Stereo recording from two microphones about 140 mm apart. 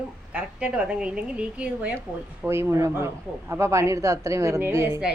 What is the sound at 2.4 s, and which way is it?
A man's voice, 20° right (ahead or behind).